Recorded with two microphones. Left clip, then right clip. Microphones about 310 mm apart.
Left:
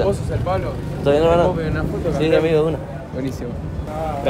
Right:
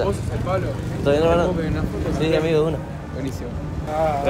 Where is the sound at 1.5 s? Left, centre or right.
Left.